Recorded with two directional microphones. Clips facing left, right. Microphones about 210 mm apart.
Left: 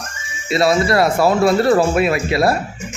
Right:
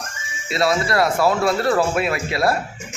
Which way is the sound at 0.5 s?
30° left (ahead or behind).